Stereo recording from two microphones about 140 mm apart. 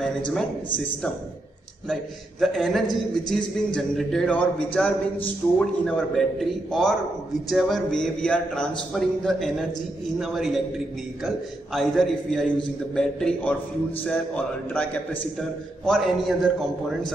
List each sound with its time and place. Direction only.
2.4 s a man's voice: centre (ahead or behind)
11.7 s a man's voice: 5° left (ahead or behind)